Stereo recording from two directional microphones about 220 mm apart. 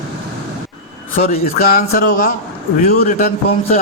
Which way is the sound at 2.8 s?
40° left (ahead or behind).